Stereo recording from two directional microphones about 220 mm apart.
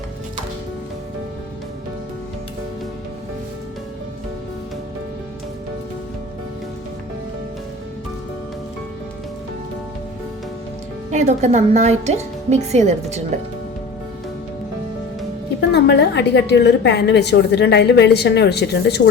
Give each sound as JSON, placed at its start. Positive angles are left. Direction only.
{"t": 11.1, "sound": "speech", "side_deg": -30}
{"t": 15.7, "sound": "a woman's voice", "side_deg": 50}